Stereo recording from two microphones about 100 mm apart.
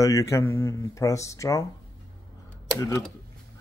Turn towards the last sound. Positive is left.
turn(degrees=35)  # may be behind; listen again after turning